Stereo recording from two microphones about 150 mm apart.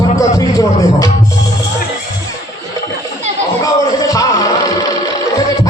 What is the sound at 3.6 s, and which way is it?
Music, 25° left (ahead or behind).